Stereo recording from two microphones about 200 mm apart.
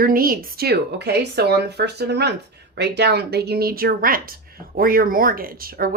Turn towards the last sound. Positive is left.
turn(degrees=-45)  # may be behind; listen again after turning